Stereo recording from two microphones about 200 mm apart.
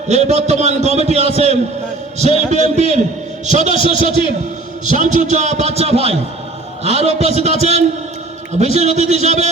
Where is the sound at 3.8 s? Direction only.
25° left (ahead or behind).